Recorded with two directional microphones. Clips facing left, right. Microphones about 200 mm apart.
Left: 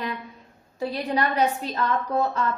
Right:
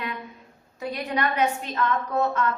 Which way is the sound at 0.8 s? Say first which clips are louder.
Left 2 dB; 30° left (ahead or behind).